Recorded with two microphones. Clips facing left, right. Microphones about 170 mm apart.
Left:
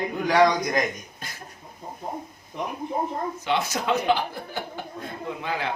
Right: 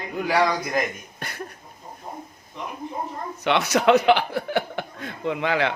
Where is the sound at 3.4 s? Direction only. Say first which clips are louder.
Right 9 dB; 75° right (ahead or behind).